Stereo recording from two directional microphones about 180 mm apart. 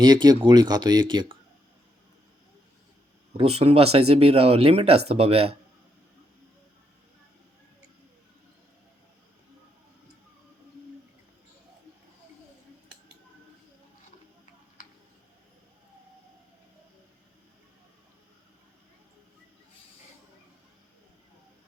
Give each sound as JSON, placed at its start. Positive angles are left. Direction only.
{"t": 0.0, "sound": "speech", "side_deg": -25}
{"t": 3.3, "sound": "speech", "side_deg": -30}